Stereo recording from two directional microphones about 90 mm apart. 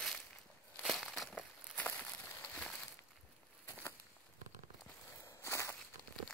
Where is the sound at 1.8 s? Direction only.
15° left (ahead or behind).